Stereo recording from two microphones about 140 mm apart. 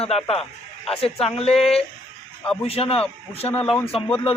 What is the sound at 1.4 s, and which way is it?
Speech, 45° left (ahead or behind).